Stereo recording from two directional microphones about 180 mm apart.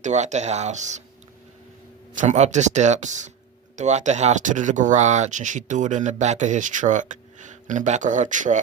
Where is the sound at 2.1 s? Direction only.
45° right (ahead or behind).